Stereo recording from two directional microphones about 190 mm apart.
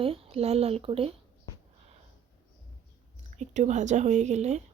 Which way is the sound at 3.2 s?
35° right (ahead or behind).